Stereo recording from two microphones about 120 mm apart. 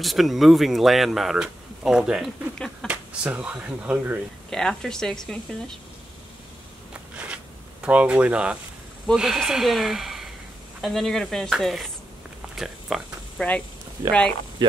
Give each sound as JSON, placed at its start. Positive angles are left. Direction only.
{"t": 0.0, "sound": "speech", "side_deg": 0}
{"t": 4.5, "sound": "speech", "side_deg": 5}
{"t": 6.9, "sound": "a sound", "side_deg": -10}
{"t": 7.8, "sound": "speech", "side_deg": -10}
{"t": 12.5, "sound": "a sound", "side_deg": -5}
{"t": 13.4, "sound": "speech", "side_deg": 5}
{"t": 14.6, "sound": "speech", "side_deg": -40}